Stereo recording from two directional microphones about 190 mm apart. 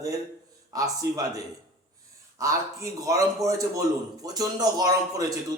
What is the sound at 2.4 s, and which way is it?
A man's voice, 15° right (ahead or behind).